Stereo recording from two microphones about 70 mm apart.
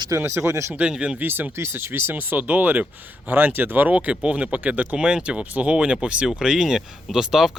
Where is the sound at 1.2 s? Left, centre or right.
Right.